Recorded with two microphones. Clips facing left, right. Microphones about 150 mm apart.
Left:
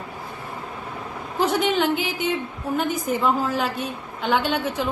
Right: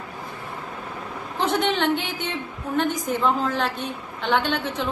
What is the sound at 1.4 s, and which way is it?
A woman's voice, 5° left (ahead or behind).